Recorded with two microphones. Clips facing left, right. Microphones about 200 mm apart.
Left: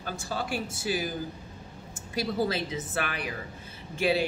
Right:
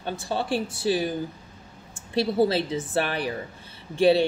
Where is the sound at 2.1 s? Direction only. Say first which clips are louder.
Right 6 dB; 30° right (ahead or behind).